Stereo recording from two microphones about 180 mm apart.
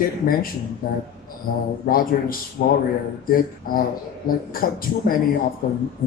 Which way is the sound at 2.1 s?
55° left (ahead or behind).